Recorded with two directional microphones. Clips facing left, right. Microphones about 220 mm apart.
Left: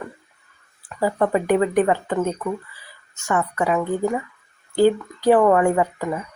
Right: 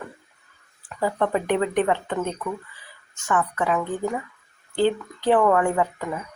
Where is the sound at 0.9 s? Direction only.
10° left (ahead or behind).